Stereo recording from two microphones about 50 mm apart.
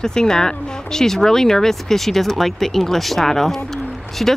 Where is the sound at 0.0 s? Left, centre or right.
Centre.